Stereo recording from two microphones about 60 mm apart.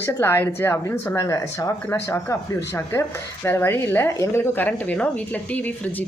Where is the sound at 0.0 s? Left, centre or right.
Left.